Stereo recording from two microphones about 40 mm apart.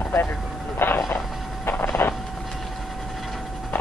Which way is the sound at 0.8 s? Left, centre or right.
Left.